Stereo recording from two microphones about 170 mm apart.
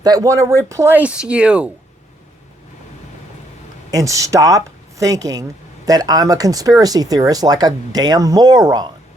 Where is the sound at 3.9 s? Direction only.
20° right (ahead or behind).